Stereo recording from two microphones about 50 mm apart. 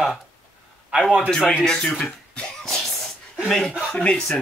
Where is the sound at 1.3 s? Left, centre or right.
Centre.